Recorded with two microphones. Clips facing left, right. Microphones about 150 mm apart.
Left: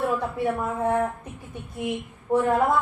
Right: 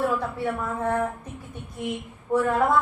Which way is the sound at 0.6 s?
20° left (ahead or behind).